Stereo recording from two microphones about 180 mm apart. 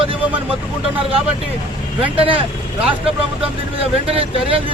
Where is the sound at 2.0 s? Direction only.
30° right (ahead or behind).